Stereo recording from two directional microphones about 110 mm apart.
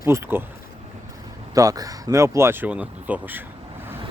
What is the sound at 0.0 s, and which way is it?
Speech, 20° right (ahead or behind).